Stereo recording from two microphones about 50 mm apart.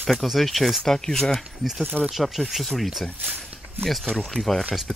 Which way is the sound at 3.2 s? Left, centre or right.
Right.